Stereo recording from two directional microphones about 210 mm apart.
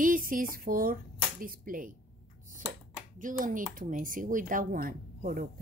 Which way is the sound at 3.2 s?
40° right (ahead or behind).